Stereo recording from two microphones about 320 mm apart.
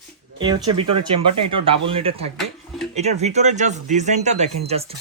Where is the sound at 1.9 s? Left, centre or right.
Centre.